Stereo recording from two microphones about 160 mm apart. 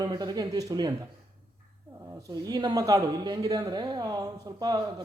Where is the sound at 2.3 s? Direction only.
25° right (ahead or behind).